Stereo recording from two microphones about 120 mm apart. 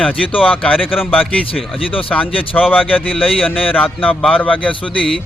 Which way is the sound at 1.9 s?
50° left (ahead or behind).